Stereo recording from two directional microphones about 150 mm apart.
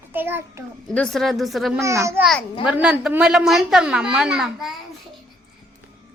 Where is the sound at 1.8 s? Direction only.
20° right (ahead or behind).